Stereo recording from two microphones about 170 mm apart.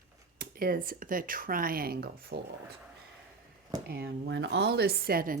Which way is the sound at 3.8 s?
65° right (ahead or behind).